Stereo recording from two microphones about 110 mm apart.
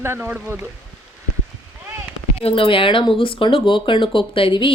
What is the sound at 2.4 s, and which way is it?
Speech, 55° left (ahead or behind).